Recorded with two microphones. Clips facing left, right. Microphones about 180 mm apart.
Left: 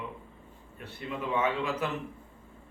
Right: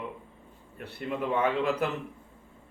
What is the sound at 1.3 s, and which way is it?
Speech, 60° right (ahead or behind).